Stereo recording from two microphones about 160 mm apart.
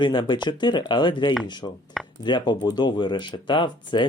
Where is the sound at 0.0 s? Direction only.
30° left (ahead or behind).